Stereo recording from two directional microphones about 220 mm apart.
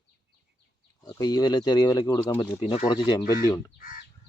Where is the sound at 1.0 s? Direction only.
20° left (ahead or behind).